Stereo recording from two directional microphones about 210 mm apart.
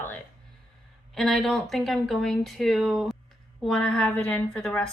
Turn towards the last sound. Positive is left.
turn(degrees=5)  # may be behind; listen again after turning